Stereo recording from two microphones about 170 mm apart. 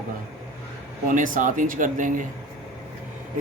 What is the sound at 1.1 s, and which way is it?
Speech, 50° right (ahead or behind).